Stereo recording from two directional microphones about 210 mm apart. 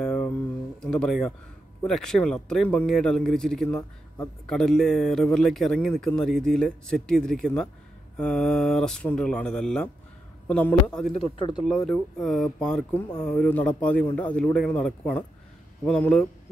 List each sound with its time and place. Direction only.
0.0 s a sound: 5° left (ahead or behind)
0.8 s speech: centre (ahead or behind)
11.3 s speech: 20° left (ahead or behind)
11.6 s speech: centre (ahead or behind)